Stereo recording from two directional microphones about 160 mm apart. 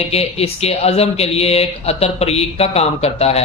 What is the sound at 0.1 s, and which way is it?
Speech, 40° left (ahead or behind).